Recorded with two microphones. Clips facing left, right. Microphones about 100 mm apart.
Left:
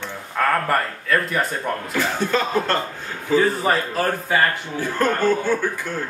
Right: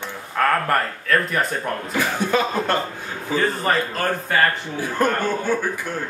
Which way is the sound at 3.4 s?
5° left (ahead or behind).